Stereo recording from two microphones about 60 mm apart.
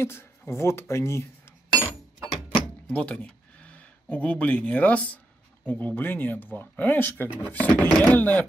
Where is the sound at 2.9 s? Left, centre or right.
Left.